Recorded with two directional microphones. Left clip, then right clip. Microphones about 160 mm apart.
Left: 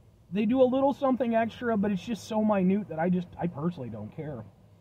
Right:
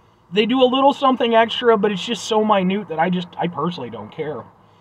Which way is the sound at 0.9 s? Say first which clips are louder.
Right 11 dB; 30° left (ahead or behind).